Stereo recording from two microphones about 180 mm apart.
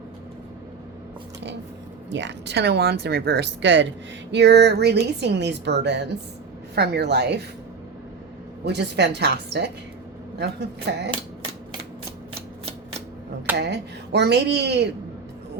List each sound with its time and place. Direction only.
2.0 s speech: 80° right
4.3 s a woman's voice: 70° right (ahead or behind)
8.6 s a woman's voice: 70° right (ahead or behind)
13.6 s a woman's voice: 70° right (ahead or behind)